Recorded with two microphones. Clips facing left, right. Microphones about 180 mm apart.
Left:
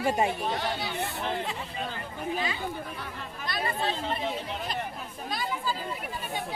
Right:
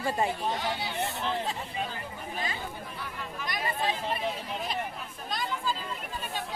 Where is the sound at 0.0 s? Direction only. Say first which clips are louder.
Left 3 dB; 20° left (ahead or behind).